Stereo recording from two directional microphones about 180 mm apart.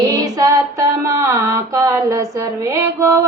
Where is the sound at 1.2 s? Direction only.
15° right (ahead or behind).